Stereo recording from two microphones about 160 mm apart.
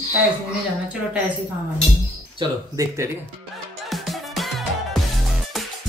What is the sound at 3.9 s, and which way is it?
Music, centre (ahead or behind).